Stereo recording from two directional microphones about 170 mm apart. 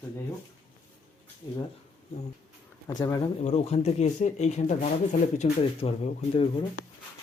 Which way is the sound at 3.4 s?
40° left (ahead or behind).